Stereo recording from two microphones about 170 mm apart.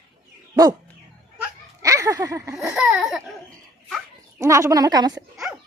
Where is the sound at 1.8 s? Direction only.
20° right (ahead or behind).